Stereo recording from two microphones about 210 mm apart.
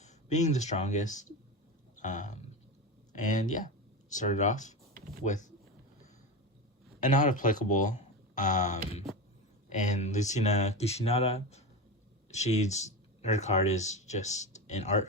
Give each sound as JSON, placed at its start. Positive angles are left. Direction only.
{"t": 0.0, "sound": "speech", "side_deg": 35}
{"t": 2.0, "sound": "a sound", "side_deg": 35}
{"t": 3.1, "sound": "speech", "side_deg": 35}
{"t": 7.0, "sound": "speech", "side_deg": 35}